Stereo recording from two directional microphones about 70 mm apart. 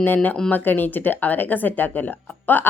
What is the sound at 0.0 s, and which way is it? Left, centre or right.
Speech, left.